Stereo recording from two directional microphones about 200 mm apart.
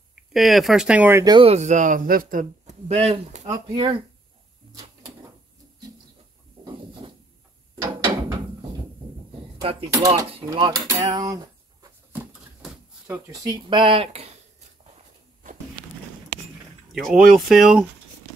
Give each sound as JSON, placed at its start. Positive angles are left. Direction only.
{"t": 0.1, "sound": "speech", "side_deg": 0}
{"t": 3.4, "sound": "speech", "side_deg": -20}
{"t": 7.0, "sound": "a sound", "side_deg": -30}
{"t": 9.6, "sound": "speech", "side_deg": -30}
{"t": 9.9, "sound": "cutlery", "side_deg": -15}
{"t": 12.3, "sound": "a sound", "side_deg": -5}
{"t": 13.1, "sound": "speech", "side_deg": -20}
{"t": 16.9, "sound": "speech", "side_deg": 0}